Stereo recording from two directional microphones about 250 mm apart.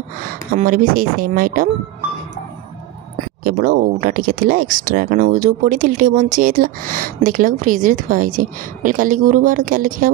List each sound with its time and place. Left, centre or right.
0.5 s speech: right
3.5 s speech: right